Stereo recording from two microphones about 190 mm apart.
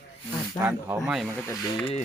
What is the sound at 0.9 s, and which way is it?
Speech, centre (ahead or behind).